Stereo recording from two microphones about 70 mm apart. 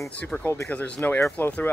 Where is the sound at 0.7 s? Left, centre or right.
Left.